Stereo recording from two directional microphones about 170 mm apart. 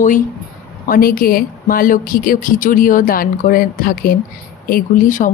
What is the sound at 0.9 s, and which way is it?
Speech, 60° left (ahead or behind).